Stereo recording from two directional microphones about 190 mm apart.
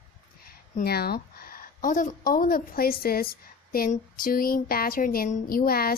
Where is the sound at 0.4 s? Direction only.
55° left (ahead or behind).